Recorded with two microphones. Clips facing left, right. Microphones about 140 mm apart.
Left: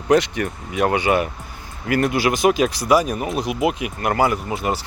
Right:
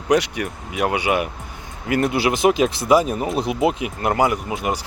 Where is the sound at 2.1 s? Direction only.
20° right (ahead or behind).